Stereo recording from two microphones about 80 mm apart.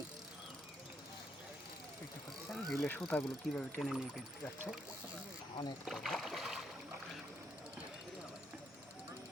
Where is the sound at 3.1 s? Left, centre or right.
Left.